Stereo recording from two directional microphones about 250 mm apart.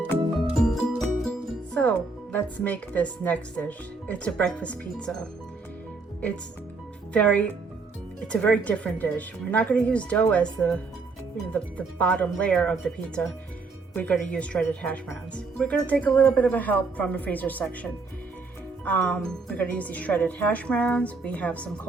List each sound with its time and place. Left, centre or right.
0.1 s music: centre
1.7 s speech: centre
7.1 s speech: centre